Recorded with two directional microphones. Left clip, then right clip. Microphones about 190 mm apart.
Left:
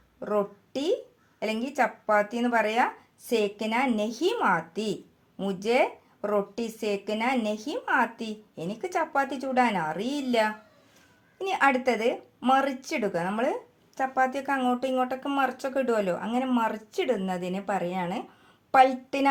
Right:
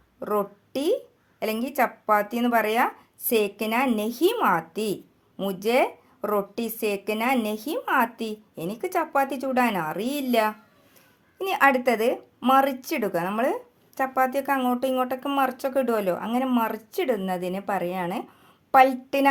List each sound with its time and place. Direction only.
0.2 s a woman's voice: 35° right (ahead or behind)